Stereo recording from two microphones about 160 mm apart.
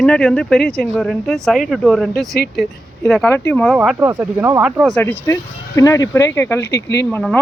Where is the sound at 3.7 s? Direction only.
5° right (ahead or behind).